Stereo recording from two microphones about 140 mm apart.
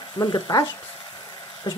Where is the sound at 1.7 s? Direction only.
35° left (ahead or behind).